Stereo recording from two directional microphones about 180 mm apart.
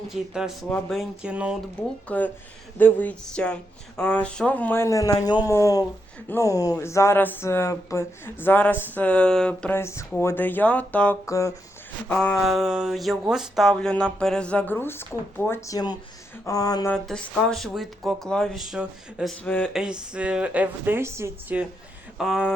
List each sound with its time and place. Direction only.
0.1 s speech: centre (ahead or behind)
2.0 s speech: 10° left (ahead or behind)
12.0 s speech: 5° left (ahead or behind)
16.9 s speech: 5° left (ahead or behind)
19.5 s speech: 10° left (ahead or behind)
19.7 s speech: 5° right (ahead or behind)